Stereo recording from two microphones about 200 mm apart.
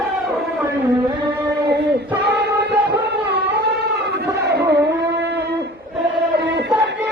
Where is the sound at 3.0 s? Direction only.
55° right (ahead or behind).